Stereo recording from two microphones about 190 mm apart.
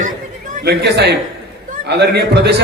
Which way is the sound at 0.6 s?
60° right (ahead or behind).